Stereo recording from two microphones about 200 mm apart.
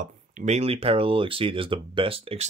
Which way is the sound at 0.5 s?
30° right (ahead or behind).